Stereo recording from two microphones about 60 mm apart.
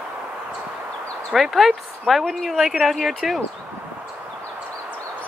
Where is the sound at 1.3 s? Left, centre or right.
Centre.